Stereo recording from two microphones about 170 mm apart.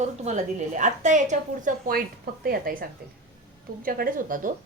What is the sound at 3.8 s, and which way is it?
Speech, 55° right (ahead or behind).